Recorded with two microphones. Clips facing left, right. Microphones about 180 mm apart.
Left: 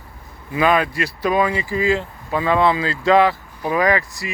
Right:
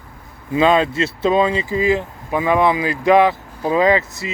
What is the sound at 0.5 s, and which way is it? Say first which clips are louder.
Speech: right 3 dB; 25° right (ahead or behind).